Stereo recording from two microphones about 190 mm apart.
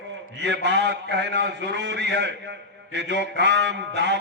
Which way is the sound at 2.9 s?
65° right (ahead or behind).